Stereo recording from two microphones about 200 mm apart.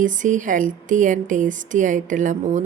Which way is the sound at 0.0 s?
40° right (ahead or behind).